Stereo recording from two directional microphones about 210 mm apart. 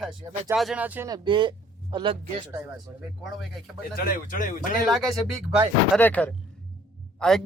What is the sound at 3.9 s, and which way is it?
Speech, 40° left (ahead or behind).